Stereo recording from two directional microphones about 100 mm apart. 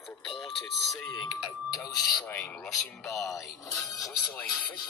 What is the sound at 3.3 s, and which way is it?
Speech, 35° left (ahead or behind).